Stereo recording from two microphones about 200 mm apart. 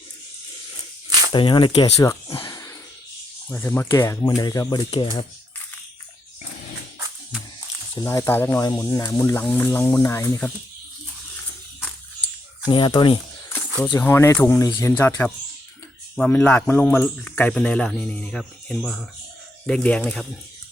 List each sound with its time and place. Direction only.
1.3 s speech: 25° left (ahead or behind)
7.9 s speech: 15° left (ahead or behind)
12.7 s speech: 20° left (ahead or behind); by 20.2 s 5° left (ahead or behind)